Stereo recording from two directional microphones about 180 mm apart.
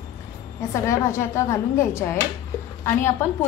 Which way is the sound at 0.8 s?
15° left (ahead or behind).